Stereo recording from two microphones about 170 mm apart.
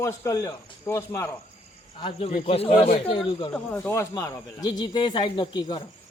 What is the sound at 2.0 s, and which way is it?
Speech, 35° left (ahead or behind).